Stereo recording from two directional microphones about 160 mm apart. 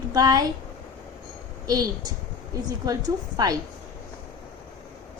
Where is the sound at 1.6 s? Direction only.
25° right (ahead or behind).